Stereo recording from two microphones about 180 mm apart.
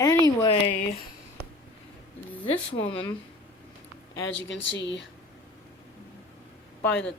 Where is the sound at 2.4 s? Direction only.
30° left (ahead or behind).